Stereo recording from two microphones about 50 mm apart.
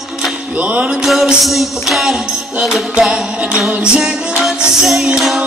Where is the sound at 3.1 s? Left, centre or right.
Centre.